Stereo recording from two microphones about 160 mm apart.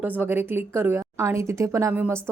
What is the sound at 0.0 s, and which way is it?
A woman's voice, 15° right (ahead or behind).